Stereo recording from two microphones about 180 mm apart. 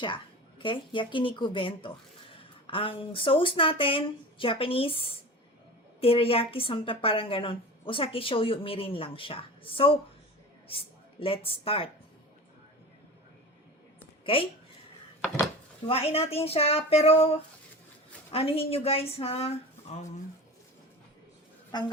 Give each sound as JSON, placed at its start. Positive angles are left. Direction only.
{"t": 0.6, "sound": "a woman's voice", "side_deg": 30}
{"t": 15.9, "sound": "a woman's voice", "side_deg": 30}
{"t": 21.7, "sound": "speech", "side_deg": 25}